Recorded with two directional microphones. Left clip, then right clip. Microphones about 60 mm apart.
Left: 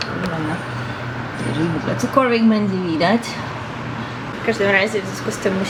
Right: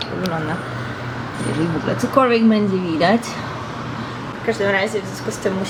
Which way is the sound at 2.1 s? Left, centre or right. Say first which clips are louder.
Right 1 dB; centre.